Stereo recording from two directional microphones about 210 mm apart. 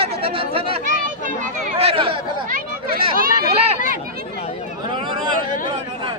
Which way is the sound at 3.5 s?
30° right (ahead or behind).